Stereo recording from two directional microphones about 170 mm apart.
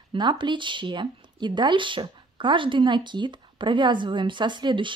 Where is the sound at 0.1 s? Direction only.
30° right (ahead or behind).